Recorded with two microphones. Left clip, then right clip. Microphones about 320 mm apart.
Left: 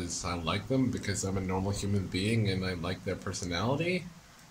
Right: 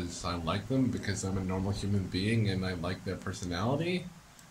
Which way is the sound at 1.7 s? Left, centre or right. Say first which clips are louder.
Left 2 dB; centre.